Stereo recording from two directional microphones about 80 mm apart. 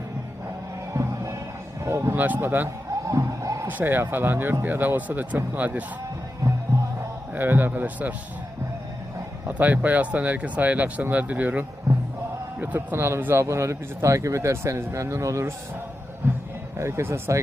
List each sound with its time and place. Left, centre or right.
0.9 s music: right
1.8 s speech: right
2.1 s speech: right
3.1 s music: right
3.7 s speech: right
7.3 s speech: right
9.5 s a man's voice: centre
13.0 s speech: right
16.2 s speech: right